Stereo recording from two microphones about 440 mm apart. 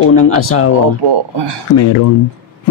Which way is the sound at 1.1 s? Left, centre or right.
Right.